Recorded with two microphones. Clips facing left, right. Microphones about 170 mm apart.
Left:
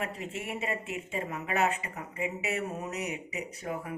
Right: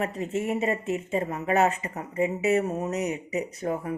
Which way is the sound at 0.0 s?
40° right (ahead or behind).